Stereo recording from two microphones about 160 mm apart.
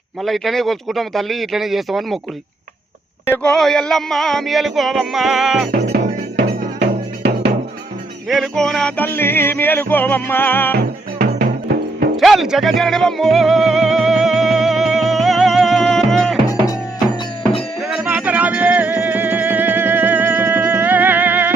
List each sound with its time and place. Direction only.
0.2 s a sound: centre (ahead or behind)
3.2 s a sound: 10° left (ahead or behind)
6.0 s music: 55° right (ahead or behind)
7.2 s music: 90° right
8.3 s music: centre (ahead or behind)
10.8 s music: 70° right (ahead or behind)
12.1 s music: centre (ahead or behind)
17.7 s music: 5° right (ahead or behind)